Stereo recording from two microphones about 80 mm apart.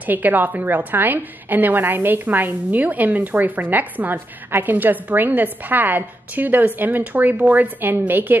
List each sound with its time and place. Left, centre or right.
0.0 s a woman's voice: right